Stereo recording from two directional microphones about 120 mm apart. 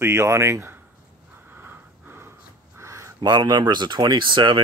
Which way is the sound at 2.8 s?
25° right (ahead or behind).